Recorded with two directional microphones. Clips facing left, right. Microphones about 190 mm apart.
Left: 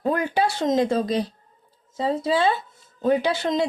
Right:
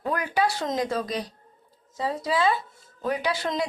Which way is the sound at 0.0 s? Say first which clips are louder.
Left 3 dB; 25° left (ahead or behind).